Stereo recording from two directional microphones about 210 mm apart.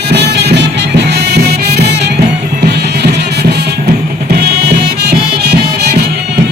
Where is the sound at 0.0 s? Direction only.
50° right (ahead or behind).